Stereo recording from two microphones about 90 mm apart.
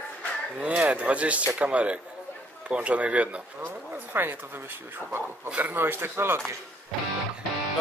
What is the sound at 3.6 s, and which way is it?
Speech, 25° right (ahead or behind).